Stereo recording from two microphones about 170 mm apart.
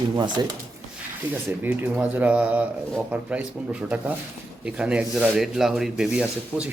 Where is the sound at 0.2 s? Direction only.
25° right (ahead or behind).